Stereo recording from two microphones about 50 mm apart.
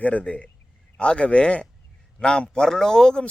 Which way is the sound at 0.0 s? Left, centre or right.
Left.